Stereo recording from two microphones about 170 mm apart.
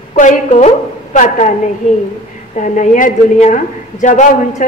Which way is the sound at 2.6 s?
45° left (ahead or behind).